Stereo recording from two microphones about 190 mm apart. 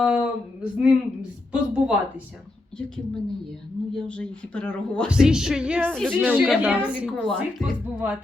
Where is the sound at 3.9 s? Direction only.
5° left (ahead or behind).